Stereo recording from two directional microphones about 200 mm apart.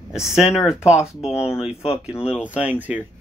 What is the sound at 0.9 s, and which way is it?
Speech, 15° left (ahead or behind).